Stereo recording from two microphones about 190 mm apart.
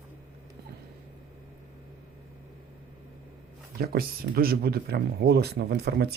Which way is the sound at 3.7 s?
55° right (ahead or behind).